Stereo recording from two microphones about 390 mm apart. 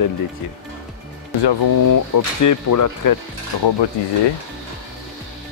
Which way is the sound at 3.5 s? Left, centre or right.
Left.